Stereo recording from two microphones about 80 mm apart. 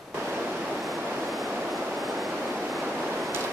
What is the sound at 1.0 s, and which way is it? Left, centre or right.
Vehicle, right.